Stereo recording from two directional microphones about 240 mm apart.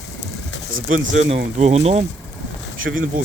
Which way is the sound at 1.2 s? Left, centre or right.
Right.